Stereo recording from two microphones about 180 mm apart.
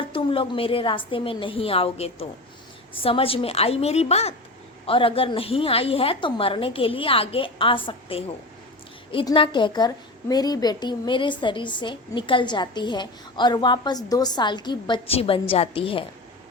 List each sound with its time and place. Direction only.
0.1 s a woman's voice: 30° left (ahead or behind)